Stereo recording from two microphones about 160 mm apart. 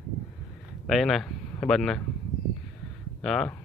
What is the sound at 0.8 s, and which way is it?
Speech, centre (ahead or behind).